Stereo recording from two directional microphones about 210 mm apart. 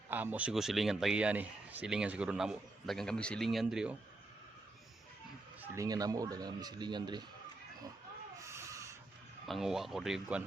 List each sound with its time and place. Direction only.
0.1 s a man's voice: 10° right (ahead or behind)
5.6 s a man's voice: 15° right (ahead or behind)
8.4 s a sound: 15° right (ahead or behind)
9.5 s a man's voice: centre (ahead or behind)